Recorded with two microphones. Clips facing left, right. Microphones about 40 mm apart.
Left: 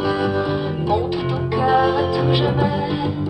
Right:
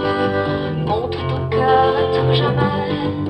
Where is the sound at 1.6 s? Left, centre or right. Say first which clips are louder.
Right 3 dB; right.